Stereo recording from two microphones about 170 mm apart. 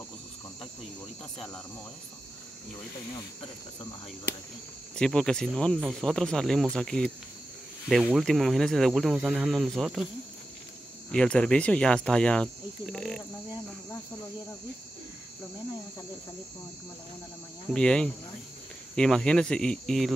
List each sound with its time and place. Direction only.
4.9 s speech: 5° left (ahead or behind)
11.1 s speech: 5° left (ahead or behind)
17.7 s speech: 5° left (ahead or behind)